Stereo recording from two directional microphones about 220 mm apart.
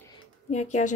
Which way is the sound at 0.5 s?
30° left (ahead or behind).